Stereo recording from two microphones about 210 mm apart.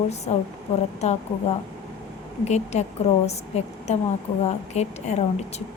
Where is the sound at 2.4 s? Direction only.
30° left (ahead or behind).